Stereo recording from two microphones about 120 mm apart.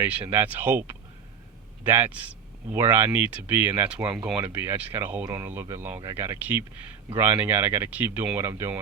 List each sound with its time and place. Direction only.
0.0 s speech: 15° right (ahead or behind)